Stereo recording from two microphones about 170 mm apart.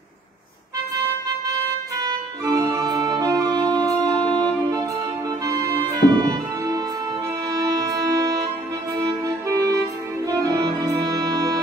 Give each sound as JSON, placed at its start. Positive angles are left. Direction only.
{"t": 1.5, "sound": "organ", "side_deg": -20}
{"t": 5.4, "sound": "music", "side_deg": -20}